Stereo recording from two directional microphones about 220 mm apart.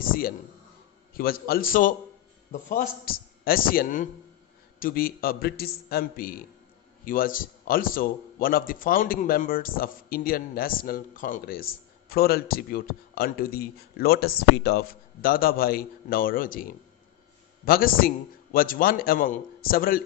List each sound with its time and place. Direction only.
0.0 s a man's voice: 40° left (ahead or behind)
17.6 s a man's voice: 40° left (ahead or behind)